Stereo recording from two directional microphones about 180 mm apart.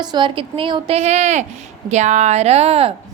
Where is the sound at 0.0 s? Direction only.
25° right (ahead or behind).